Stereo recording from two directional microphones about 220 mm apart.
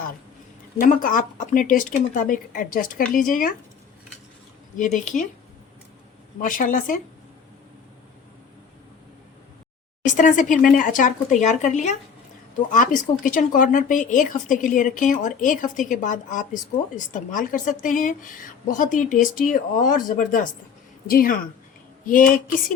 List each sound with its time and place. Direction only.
0.8 s speech: 40° left (ahead or behind)
4.8 s speech: 35° left (ahead or behind)
6.4 s speech: 35° left (ahead or behind)
10.0 s speech: 35° left (ahead or behind)
22.0 s a sound: 40° left (ahead or behind)